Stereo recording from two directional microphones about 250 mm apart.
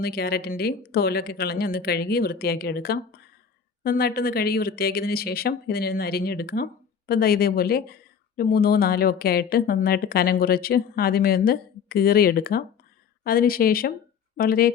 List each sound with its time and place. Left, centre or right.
0.0 s a woman's voice: left